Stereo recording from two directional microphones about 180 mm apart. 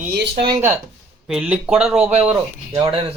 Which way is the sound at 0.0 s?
60° right (ahead or behind).